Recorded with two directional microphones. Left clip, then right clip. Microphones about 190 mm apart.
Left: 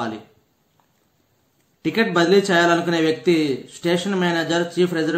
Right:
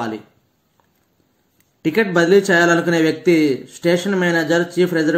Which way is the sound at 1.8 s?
20° right (ahead or behind).